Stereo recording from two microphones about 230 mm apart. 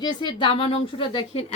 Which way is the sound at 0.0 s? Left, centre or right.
Centre.